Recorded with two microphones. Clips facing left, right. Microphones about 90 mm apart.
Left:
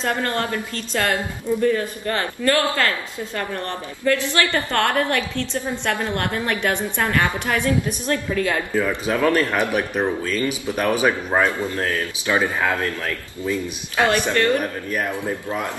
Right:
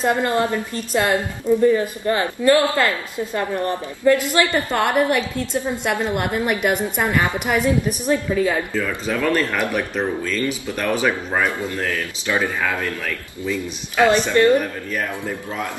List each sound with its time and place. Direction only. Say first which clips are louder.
0.0 s a woman's voice: right 4 dB; 15° right (ahead or behind)
8.7 s speech: left 2 dB; 20° left (ahead or behind)
14.3 s speech: right 7 dB; 20° right (ahead or behind)
14.9 s speech: left 1 dB; 15° left (ahead or behind)